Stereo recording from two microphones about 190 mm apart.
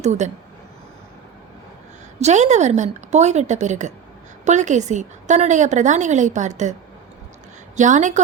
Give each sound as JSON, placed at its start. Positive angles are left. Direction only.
{"t": 0.0, "sound": "a woman's voice", "side_deg": -35}
{"t": 2.1, "sound": "a woman's voice", "side_deg": -35}
{"t": 7.8, "sound": "a woman's voice", "side_deg": -40}